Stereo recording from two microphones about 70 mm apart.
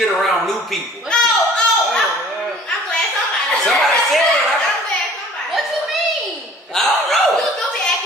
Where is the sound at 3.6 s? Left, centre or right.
Centre.